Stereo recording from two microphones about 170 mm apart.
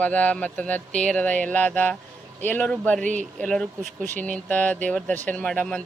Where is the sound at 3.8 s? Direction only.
45° right (ahead or behind).